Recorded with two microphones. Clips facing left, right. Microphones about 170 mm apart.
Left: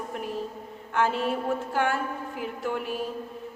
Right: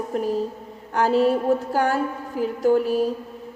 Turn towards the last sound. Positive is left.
turn(degrees=-40)  # may be behind; listen again after turning